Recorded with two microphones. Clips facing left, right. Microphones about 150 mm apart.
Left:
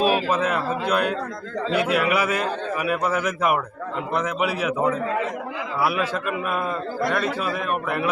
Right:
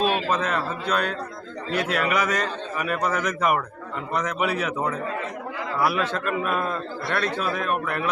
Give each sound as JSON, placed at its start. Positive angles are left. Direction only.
{"t": 0.0, "sound": "a man's voice", "side_deg": 10}